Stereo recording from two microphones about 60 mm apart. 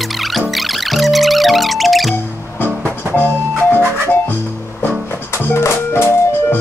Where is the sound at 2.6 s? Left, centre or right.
Right.